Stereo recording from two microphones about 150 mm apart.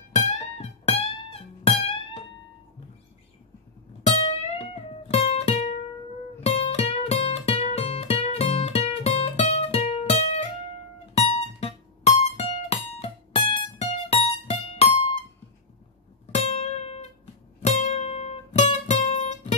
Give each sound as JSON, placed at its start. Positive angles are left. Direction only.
{"t": 0.3, "sound": "music", "side_deg": 45}
{"t": 4.0, "sound": "music", "side_deg": 40}
{"t": 16.4, "sound": "music", "side_deg": 45}